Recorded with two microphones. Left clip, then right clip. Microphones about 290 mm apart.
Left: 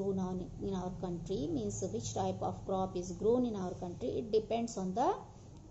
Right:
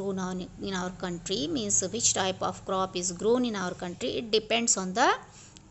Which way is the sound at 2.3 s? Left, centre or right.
Right.